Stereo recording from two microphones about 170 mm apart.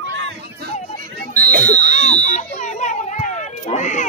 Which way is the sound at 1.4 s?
60° right (ahead or behind).